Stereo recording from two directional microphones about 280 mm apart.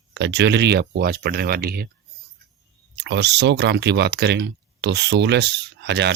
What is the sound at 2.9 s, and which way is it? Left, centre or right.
Speech, right.